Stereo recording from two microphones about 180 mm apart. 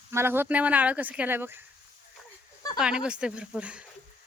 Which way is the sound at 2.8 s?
5° right (ahead or behind).